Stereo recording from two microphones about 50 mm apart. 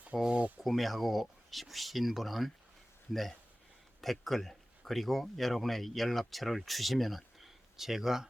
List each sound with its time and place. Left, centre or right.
0.3 s speech: right
0.6 s speech: centre